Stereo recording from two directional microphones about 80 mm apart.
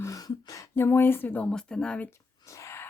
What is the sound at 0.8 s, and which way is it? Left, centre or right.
Speech, left.